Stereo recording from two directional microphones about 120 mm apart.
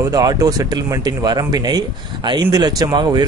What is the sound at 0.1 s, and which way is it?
A man's voice, 30° right (ahead or behind).